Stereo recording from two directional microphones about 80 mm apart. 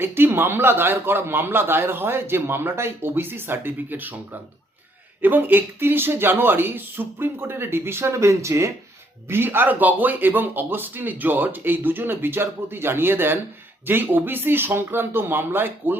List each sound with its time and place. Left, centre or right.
0.0 s a man's voice: right
5.2 s a man's voice: right